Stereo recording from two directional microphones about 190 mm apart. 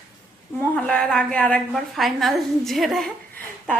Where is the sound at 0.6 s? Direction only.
5° left (ahead or behind).